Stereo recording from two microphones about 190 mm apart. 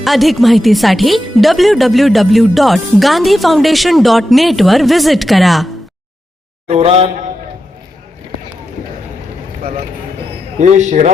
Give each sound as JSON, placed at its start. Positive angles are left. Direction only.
{"t": 0.0, "sound": "speech", "side_deg": 0}
{"t": 6.7, "sound": "a man's voice", "side_deg": -35}
{"t": 10.6, "sound": "a man's voice", "side_deg": -40}